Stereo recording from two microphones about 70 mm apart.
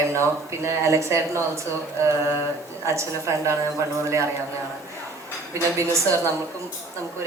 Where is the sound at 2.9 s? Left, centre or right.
Right.